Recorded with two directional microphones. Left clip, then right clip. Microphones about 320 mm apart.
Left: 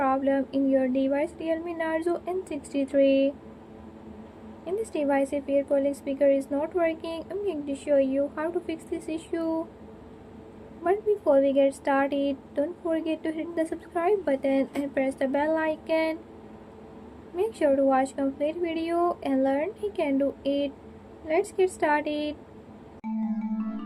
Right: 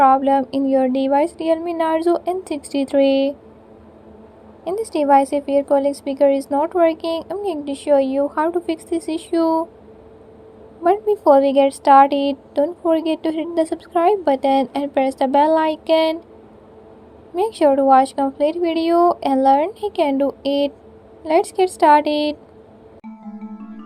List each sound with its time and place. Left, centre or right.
0.0 s a woman's voice: right
4.6 s a woman's voice: right
10.8 s a woman's voice: right
17.3 s a woman's voice: right